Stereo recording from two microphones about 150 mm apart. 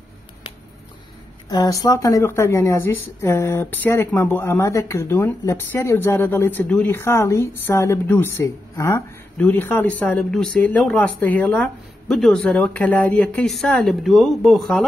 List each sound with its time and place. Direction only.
1.5 s speech: 25° left (ahead or behind); by 14.9 s centre (ahead or behind)